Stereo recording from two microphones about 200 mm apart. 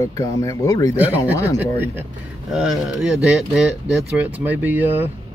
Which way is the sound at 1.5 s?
10° right (ahead or behind).